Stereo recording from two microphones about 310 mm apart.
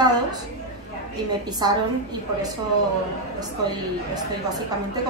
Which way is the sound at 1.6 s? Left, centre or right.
Centre.